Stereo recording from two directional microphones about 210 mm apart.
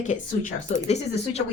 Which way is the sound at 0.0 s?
35° left (ahead or behind).